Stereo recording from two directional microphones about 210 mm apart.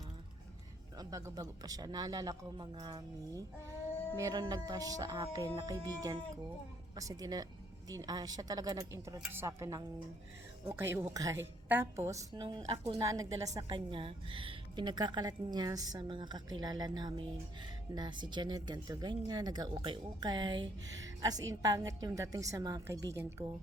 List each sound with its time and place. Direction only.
0.9 s a woman's voice: 15° right (ahead or behind)